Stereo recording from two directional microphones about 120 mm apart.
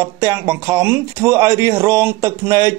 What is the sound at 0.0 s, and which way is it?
Speech, 25° right (ahead or behind).